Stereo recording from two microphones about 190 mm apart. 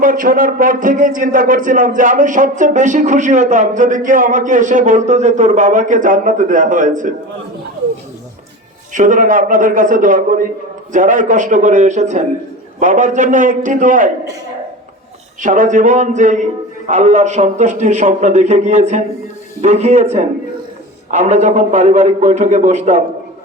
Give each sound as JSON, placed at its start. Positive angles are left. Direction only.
{"t": 0.0, "sound": "a man's voice", "side_deg": -45}
{"t": 8.9, "sound": "a man's voice", "side_deg": -45}
{"t": 15.4, "sound": "a man's voice", "side_deg": -45}